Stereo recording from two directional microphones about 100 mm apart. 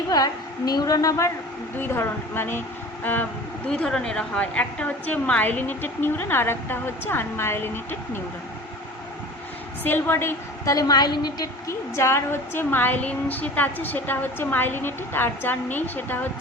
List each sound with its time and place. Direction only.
0.1 s a woman's voice: 40° left (ahead or behind)
1.8 s a woman's voice: 25° left (ahead or behind)
3.7 s a woman's voice: 5° left (ahead or behind)
9.8 s a woman's voice: 20° left (ahead or behind)
10.8 s a woman's voice: 40° left (ahead or behind)
11.7 s a woman's voice: 25° left (ahead or behind)